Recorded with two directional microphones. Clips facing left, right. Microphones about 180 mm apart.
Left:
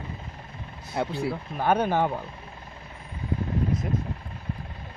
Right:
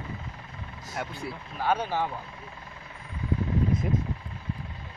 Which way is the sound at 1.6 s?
55° left (ahead or behind).